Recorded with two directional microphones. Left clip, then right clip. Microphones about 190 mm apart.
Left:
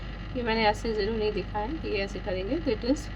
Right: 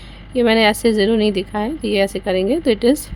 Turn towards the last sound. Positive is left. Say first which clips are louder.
# right 13 dB
turn(degrees=-70)  # may be behind; listen again after turning